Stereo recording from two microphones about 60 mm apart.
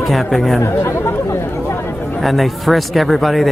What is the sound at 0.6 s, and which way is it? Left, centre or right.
Chatter, left.